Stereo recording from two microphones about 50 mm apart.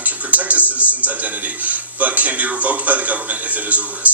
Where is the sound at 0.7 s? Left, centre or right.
Right.